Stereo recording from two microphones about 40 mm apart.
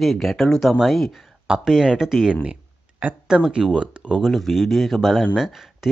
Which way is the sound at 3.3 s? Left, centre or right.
Right.